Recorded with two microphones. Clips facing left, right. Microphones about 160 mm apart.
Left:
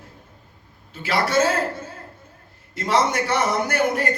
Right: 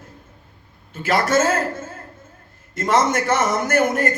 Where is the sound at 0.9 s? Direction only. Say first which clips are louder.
Right 3 dB; 45° right (ahead or behind).